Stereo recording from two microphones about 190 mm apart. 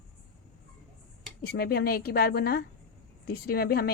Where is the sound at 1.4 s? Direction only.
55° left (ahead or behind).